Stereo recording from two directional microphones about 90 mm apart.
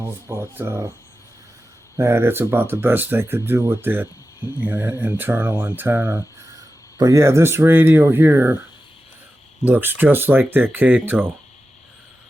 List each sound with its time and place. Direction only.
0.0 s speech: 25° right (ahead or behind)
2.0 s speech: 30° right (ahead or behind)
7.0 s speech: 35° right (ahead or behind)
9.6 s speech: 20° right (ahead or behind)